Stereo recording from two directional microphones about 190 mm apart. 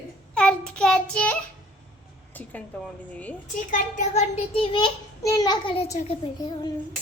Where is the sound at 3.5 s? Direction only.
40° left (ahead or behind).